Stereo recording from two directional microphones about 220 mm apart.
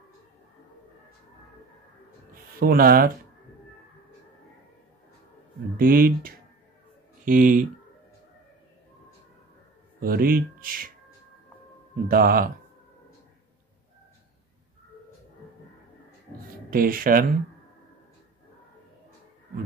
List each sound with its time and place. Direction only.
2.6 s speech: 40° right (ahead or behind)
5.8 s speech: 40° right (ahead or behind)
9.9 s speech: 40° right (ahead or behind)
12.1 s speech: 40° right (ahead or behind)
16.7 s speech: 40° right (ahead or behind)